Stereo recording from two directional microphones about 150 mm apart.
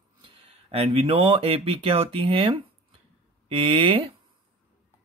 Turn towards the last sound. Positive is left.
turn(degrees=-35)  # may be behind; listen again after turning